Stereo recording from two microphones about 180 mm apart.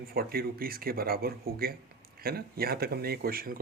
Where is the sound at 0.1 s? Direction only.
55° right (ahead or behind).